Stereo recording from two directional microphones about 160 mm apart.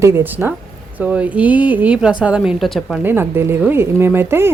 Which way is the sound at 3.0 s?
15° right (ahead or behind).